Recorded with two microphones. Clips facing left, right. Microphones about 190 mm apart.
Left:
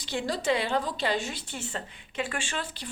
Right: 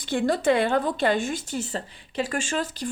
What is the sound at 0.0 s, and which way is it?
A woman's voice, 55° right (ahead or behind).